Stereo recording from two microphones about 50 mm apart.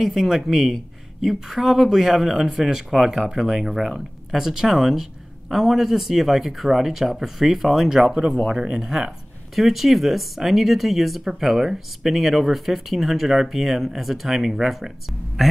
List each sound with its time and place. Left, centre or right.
0.0 s speech: centre
9.6 s speech: centre